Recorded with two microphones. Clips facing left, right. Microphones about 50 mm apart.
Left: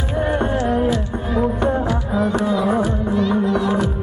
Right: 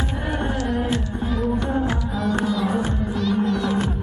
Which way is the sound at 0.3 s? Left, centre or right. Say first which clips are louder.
Left 5 dB; left.